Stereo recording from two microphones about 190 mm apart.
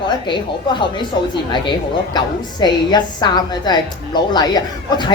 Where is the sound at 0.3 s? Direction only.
25° left (ahead or behind).